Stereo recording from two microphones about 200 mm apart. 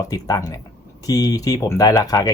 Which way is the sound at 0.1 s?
20° left (ahead or behind).